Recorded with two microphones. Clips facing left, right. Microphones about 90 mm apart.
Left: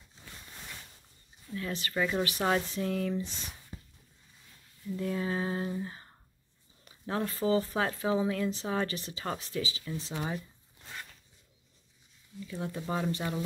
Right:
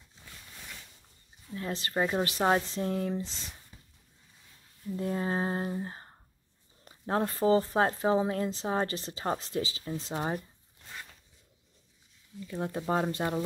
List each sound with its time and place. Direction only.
1.5 s speech: 30° right (ahead or behind)
3.7 s a sound: 45° left (ahead or behind)
4.8 s speech: 35° right (ahead or behind)
12.4 s speech: 45° right (ahead or behind)